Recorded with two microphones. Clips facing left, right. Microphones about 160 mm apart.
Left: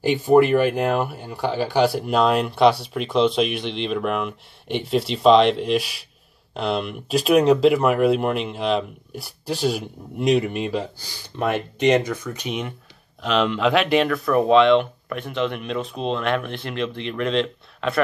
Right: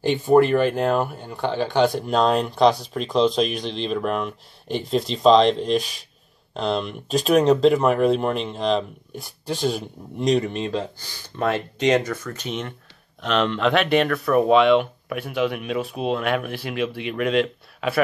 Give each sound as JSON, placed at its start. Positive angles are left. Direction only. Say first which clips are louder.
{"t": 0.0, "sound": "speech", "louder": "left 1 dB", "side_deg": 10}
{"t": 3.4, "sound": "speech", "louder": "left 1 dB", "side_deg": -40}
{"t": 3.7, "sound": "speech", "louder": "even", "side_deg": 0}